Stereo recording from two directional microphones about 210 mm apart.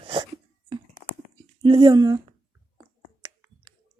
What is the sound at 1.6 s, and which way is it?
Speech, 20° right (ahead or behind).